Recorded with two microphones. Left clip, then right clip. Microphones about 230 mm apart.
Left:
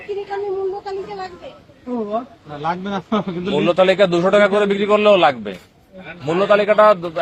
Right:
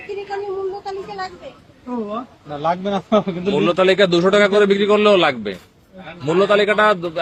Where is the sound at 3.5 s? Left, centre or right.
Centre.